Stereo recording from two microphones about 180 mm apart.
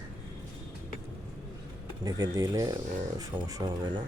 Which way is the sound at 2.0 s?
20° right (ahead or behind).